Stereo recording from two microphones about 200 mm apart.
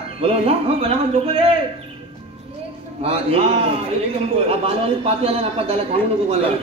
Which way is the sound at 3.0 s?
30° right (ahead or behind).